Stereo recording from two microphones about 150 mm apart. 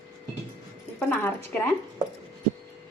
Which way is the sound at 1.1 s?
10° left (ahead or behind).